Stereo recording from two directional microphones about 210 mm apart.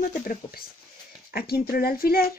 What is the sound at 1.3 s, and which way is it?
Speech, 45° left (ahead or behind).